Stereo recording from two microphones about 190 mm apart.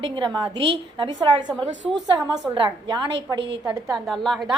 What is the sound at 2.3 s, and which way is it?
Speech, 25° right (ahead or behind).